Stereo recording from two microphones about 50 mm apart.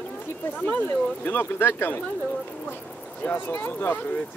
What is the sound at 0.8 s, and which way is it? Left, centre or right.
Speech, left.